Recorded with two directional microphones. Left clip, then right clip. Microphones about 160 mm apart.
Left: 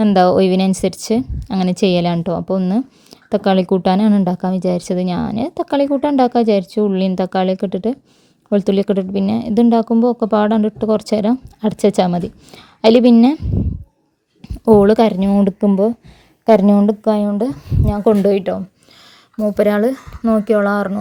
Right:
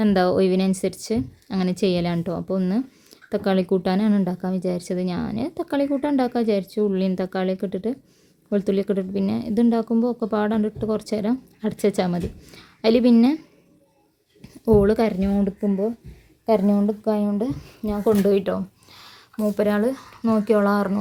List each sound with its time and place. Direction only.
0.0 s a woman's voice: 35° left (ahead or behind)
19.5 s speech: 35° left (ahead or behind)